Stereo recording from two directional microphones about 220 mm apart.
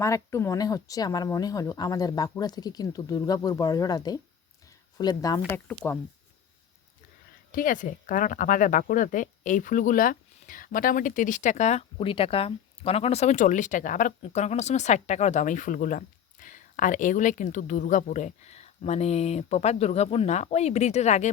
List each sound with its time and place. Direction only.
0.0 s speech: 15° left (ahead or behind)
7.5 s speech: 35° left (ahead or behind)